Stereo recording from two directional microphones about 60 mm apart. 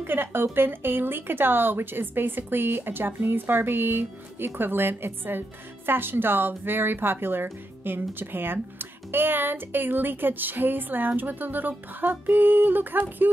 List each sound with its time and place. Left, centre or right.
0.0 s speech: right